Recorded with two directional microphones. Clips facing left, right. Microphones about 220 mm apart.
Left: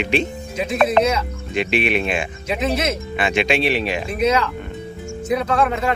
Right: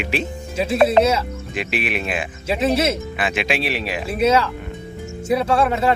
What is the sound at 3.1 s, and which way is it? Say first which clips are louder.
Speech: left 3 dB; centre (ahead or behind).